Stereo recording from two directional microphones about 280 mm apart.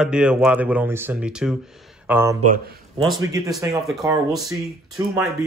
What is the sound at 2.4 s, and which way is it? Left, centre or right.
Speech, right.